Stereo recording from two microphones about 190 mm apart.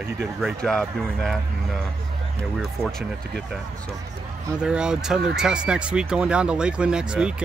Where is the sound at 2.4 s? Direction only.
Centre (ahead or behind).